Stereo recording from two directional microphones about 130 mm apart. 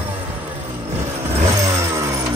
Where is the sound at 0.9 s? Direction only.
20° right (ahead or behind).